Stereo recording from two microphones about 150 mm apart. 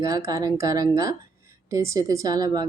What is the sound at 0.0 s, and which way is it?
A woman's voice, 20° right (ahead or behind).